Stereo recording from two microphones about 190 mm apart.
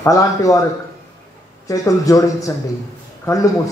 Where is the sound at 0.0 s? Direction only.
15° left (ahead or behind).